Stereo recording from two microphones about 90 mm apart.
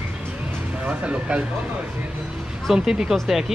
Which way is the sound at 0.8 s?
10° right (ahead or behind).